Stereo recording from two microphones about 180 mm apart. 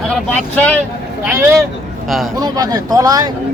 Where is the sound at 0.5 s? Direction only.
10° left (ahead or behind).